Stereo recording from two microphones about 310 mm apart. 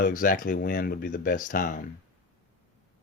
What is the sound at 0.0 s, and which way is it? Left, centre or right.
Speech, left.